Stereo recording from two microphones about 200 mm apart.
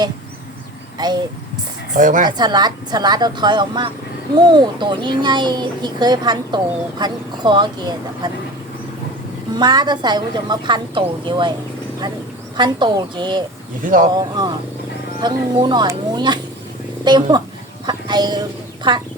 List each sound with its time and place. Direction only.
0.9 s speech: 20° right (ahead or behind)
1.9 s speech: 40° right (ahead or behind)
2.4 s speech: 20° right (ahead or behind)
9.6 s speech: 20° right (ahead or behind)
12.5 s speech: 20° right (ahead or behind)
13.8 s speech: 45° right (ahead or behind)
14.1 s speech: 20° right (ahead or behind)